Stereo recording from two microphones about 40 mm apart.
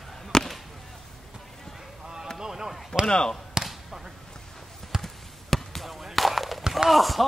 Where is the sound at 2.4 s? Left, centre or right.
Centre.